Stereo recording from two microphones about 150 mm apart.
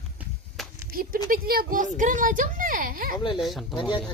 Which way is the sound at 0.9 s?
75° right (ahead or behind).